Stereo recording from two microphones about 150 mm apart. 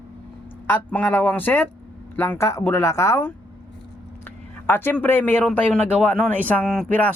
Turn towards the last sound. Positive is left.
turn(degrees=10)  # may be behind; listen again after turning